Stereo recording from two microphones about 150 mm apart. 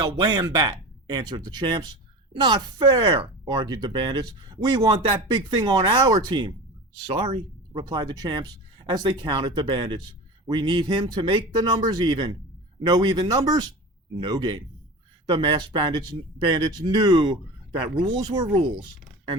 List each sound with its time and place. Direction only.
0.0 s a woman's voice: 30° right (ahead or behind)